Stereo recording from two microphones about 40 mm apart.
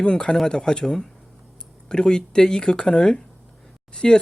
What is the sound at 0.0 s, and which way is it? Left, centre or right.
Speech, left.